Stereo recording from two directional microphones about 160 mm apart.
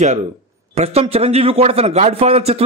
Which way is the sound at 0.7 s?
40° right (ahead or behind).